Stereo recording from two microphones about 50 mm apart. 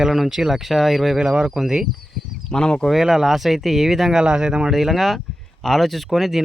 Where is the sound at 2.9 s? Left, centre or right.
Centre.